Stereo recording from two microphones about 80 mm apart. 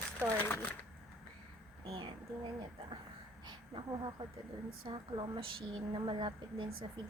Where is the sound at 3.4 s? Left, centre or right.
Right.